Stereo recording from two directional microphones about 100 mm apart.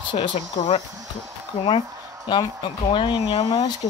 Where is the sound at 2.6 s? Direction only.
55° left (ahead or behind).